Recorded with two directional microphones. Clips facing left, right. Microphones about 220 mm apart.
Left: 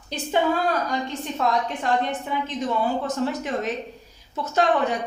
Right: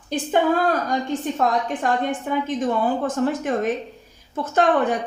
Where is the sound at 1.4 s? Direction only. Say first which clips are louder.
Even; 45° right (ahead or behind).